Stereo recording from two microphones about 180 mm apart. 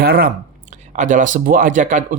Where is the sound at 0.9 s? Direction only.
45° right (ahead or behind).